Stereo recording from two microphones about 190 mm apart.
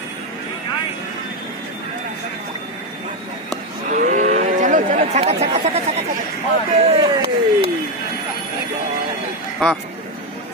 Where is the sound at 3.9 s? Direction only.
45° right (ahead or behind).